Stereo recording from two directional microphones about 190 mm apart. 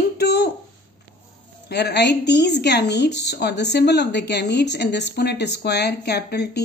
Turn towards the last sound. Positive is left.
turn(degrees=60)  # may be behind; listen again after turning